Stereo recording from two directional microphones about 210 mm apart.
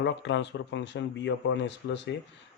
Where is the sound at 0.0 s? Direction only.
55° left (ahead or behind).